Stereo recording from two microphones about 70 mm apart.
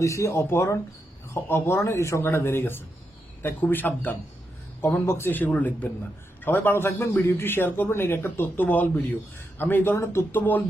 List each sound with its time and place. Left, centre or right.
0.0 s a man's voice: left
5.5 s a man's voice: centre